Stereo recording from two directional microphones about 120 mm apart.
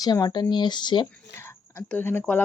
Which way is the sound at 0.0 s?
35° left (ahead or behind).